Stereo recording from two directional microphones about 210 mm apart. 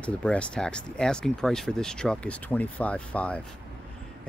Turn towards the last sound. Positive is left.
turn(degrees=5)  # may be behind; listen again after turning